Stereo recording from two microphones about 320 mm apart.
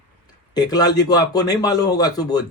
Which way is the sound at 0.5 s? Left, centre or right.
Centre.